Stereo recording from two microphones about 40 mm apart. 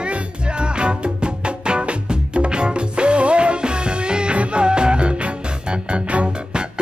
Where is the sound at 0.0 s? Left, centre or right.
Right.